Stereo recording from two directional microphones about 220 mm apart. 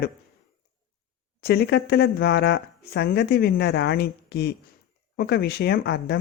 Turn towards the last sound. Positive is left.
turn(degrees=50)  # may be behind; listen again after turning